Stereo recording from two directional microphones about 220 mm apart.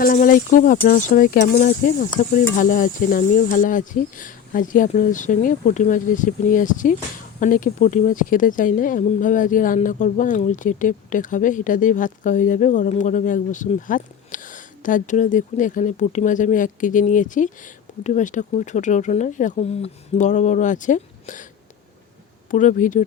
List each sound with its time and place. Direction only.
0.0 s speech: 40° left (ahead or behind)
22.4 s speech: 35° left (ahead or behind)